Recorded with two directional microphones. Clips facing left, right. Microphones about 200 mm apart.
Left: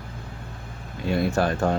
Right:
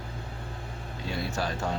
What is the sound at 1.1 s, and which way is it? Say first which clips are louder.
Speech: left 9 dB; 55° left (ahead or behind).